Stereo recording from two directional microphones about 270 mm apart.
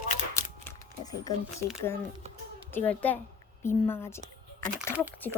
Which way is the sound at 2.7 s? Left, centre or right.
Centre.